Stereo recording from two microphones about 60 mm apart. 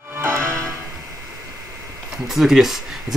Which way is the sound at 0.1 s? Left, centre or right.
Right.